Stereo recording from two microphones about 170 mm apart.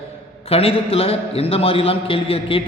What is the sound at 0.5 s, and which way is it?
A man's voice, 35° left (ahead or behind).